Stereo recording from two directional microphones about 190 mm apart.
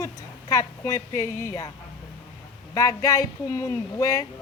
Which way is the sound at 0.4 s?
20° left (ahead or behind).